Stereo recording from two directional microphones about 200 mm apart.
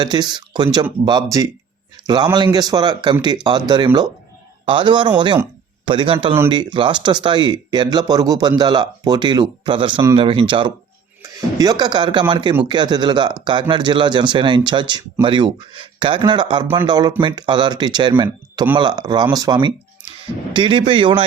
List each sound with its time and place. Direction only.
0.0 s speech: 20° right (ahead or behind)